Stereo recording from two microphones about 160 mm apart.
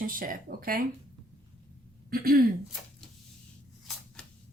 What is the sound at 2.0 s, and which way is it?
Speech, 70° right (ahead or behind).